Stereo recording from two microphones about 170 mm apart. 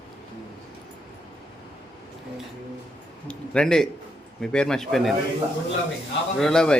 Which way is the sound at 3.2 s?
5° left (ahead or behind).